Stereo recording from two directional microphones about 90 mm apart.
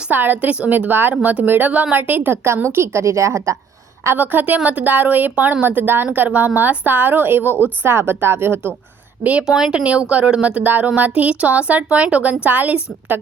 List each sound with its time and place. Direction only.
0.1 s a woman's voice: 20° right (ahead or behind); by 3.6 s 35° right (ahead or behind)
4.0 s a woman's voice: 25° right (ahead or behind)
9.5 s speech: 5° right (ahead or behind)